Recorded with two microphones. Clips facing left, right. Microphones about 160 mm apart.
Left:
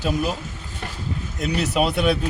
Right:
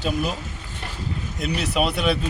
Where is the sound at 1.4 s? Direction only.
Centre (ahead or behind).